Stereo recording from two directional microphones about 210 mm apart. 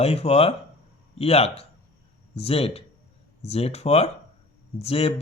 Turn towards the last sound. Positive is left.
turn(degrees=30)  # may be behind; listen again after turning